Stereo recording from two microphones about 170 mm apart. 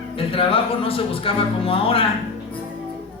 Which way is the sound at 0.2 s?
35° left (ahead or behind).